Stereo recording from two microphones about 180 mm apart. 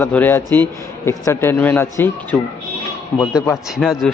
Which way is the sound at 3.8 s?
Centre (ahead or behind).